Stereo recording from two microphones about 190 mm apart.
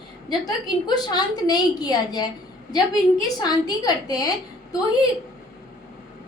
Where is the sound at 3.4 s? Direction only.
20° left (ahead or behind).